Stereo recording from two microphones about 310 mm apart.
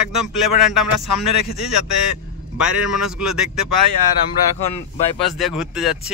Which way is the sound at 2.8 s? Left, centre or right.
Left.